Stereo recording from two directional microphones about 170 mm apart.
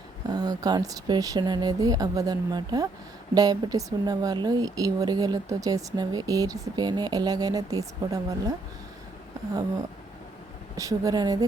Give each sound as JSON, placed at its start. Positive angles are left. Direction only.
{"t": 0.3, "sound": "a woman's voice", "side_deg": -25}
{"t": 10.8, "sound": "a woman's voice", "side_deg": -20}